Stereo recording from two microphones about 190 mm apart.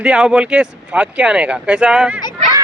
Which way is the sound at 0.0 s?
5° right (ahead or behind).